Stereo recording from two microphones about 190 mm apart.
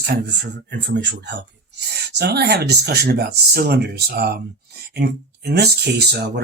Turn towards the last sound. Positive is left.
turn(degrees=-60)  # may be behind; listen again after turning